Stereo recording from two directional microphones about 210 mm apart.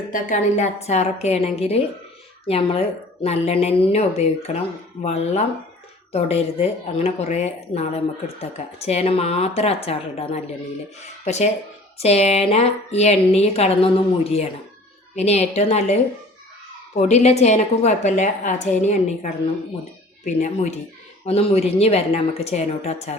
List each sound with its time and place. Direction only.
0.1 s speech: 35° left (ahead or behind)